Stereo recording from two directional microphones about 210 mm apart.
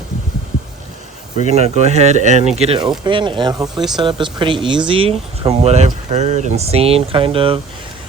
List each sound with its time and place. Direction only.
1.5 s speech: 30° right (ahead or behind)